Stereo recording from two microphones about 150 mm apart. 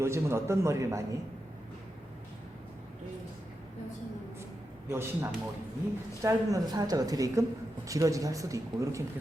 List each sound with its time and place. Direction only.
0.0 s speech: 15° right (ahead or behind)
4.9 s a man's voice: 15° right (ahead or behind)